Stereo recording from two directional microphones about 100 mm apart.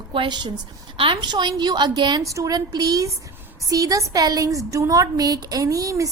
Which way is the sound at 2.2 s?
35° right (ahead or behind).